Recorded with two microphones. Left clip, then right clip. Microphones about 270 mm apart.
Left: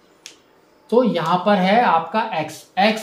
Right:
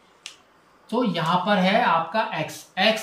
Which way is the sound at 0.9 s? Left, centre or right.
Centre.